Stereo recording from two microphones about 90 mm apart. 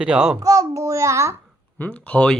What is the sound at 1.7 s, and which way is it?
Speech, 15° left (ahead or behind).